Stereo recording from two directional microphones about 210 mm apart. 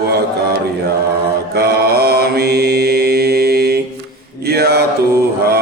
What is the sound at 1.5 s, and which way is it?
Mantra, 50° right (ahead or behind).